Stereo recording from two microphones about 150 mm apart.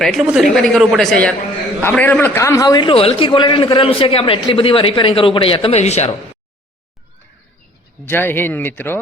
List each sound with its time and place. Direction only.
0.0 s a woman's voice: centre (ahead or behind); by 2.9 s 25° left (ahead or behind)
2.9 s a man's voice: 40° left (ahead or behind)
8.0 s a man's voice: 15° left (ahead or behind)